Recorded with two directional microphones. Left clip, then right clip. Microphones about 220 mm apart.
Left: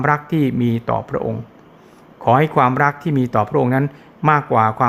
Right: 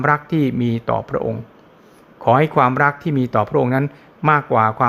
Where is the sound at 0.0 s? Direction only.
Centre (ahead or behind).